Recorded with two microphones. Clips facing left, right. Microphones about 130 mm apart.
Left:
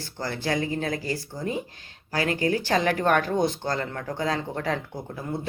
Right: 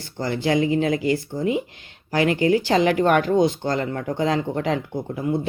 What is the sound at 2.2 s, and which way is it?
Speech, 40° left (ahead or behind).